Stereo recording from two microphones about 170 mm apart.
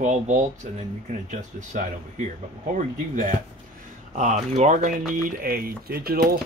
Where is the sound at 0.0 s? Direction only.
45° right (ahead or behind).